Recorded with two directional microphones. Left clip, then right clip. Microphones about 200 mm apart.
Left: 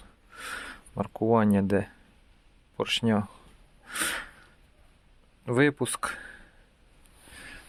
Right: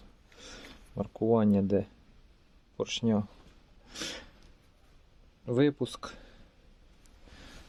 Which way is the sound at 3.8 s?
5° right (ahead or behind).